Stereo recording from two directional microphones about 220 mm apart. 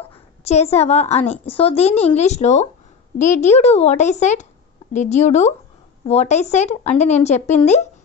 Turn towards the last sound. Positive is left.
turn(degrees=30)  # may be behind; listen again after turning